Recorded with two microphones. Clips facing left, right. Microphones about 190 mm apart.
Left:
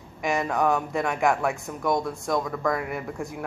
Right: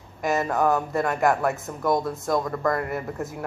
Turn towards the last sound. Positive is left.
turn(degrees=0)  # may be behind; listen again after turning